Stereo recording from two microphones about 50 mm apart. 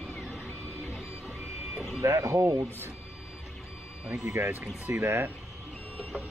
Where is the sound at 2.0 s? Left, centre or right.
Right.